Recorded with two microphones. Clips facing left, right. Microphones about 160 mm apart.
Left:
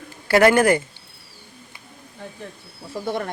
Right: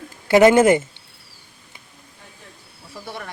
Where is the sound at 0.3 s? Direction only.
20° right (ahead or behind).